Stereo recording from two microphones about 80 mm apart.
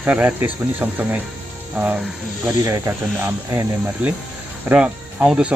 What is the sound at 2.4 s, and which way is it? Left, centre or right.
Speech, right.